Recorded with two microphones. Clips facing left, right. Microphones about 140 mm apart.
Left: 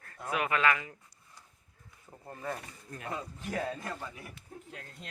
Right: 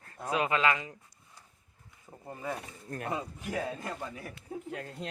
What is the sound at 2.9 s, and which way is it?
Speech, 50° right (ahead or behind).